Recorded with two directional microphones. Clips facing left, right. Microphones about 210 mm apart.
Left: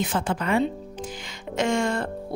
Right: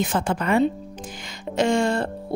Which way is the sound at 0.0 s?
45° right (ahead or behind).